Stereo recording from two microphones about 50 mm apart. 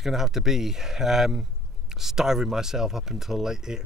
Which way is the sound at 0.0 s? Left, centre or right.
Centre.